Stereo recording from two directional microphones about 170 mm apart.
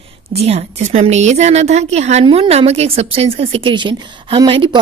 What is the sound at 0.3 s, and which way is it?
A woman's voice, 40° right (ahead or behind).